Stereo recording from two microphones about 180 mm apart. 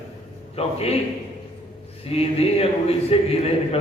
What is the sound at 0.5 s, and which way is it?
Speech, 35° left (ahead or behind).